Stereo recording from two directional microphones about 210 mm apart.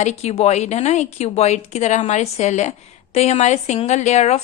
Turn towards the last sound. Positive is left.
turn(degrees=30)  # may be behind; listen again after turning